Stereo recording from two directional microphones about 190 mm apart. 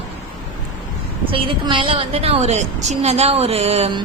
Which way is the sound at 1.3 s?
30° right (ahead or behind).